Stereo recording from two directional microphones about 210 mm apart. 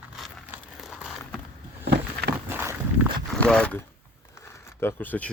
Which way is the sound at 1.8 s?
50° right (ahead or behind).